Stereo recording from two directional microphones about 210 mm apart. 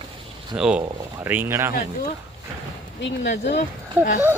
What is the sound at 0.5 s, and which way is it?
Speech, 5° right (ahead or behind).